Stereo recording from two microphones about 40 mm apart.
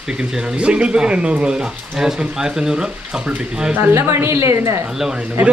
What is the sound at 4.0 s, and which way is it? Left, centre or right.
Speech, right.